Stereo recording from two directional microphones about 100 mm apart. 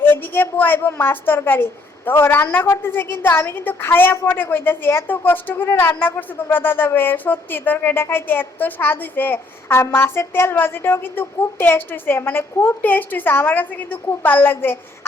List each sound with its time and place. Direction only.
0.0 s a woman's voice: 20° left (ahead or behind)